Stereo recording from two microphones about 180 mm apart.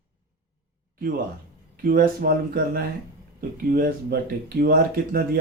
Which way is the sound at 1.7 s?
55° right (ahead or behind).